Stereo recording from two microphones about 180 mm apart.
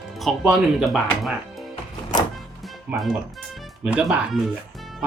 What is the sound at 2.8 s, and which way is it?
Speech, 5° right (ahead or behind).